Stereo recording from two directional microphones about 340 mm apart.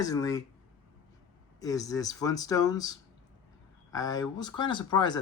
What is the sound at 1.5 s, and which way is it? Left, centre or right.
Speech, centre.